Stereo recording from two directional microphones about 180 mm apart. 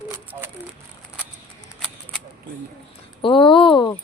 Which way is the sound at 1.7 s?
Centre (ahead or behind).